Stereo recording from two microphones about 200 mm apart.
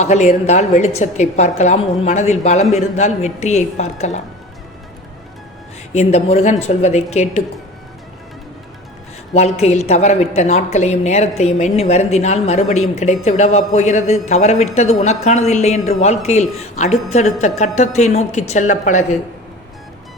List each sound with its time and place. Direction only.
0.0 s a woman's voice: 35° left (ahead or behind)
5.9 s a woman's voice: 35° left (ahead or behind)
9.3 s a woman's voice: 30° left (ahead or behind)